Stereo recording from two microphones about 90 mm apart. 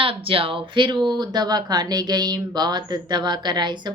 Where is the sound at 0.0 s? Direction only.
90° right.